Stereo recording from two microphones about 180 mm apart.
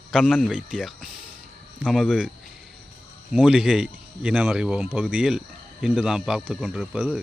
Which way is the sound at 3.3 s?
5° right (ahead or behind).